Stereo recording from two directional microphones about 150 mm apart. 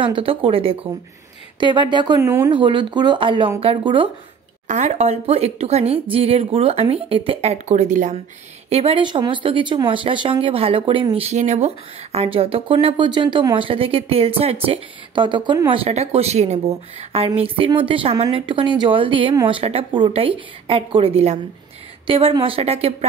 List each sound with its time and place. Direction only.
0.0 s speech: 35° right (ahead or behind); by 2.5 s 20° right (ahead or behind)
2.5 s speech: 35° right (ahead or behind)
4.6 s speech: 50° right (ahead or behind)
7.5 s speech: 50° right (ahead or behind)
8.6 s speech: 40° right (ahead or behind)